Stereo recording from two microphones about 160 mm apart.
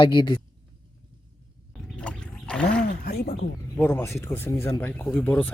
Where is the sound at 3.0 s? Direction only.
75° left (ahead or behind).